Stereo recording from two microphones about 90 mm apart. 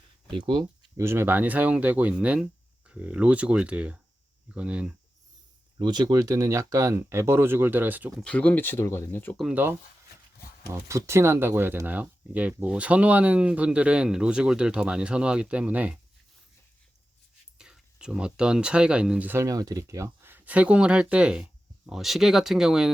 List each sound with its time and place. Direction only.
0.3 s speech: 65° right (ahead or behind)
0.9 s speech: 30° right (ahead or behind); by 4.9 s 10° right (ahead or behind)
5.8 s speech: 50° right (ahead or behind); by 8.1 s 20° right (ahead or behind)
8.2 s speech: 10° left (ahead or behind)
9.5 s speech: 20° right (ahead or behind)
10.7 s speech: 30° right (ahead or behind); by 16.0 s 15° right (ahead or behind)
17.6 s speech: 5° right (ahead or behind)
19.3 s speech: 35° right (ahead or behind)
20.2 s speech: 20° right (ahead or behind)